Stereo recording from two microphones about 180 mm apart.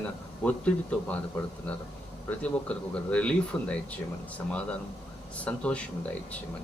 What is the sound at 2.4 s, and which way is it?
Speech, 5° left (ahead or behind).